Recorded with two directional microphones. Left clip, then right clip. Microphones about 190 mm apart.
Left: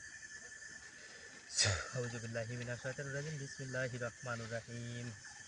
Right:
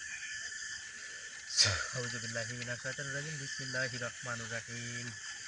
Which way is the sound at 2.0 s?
15° left (ahead or behind).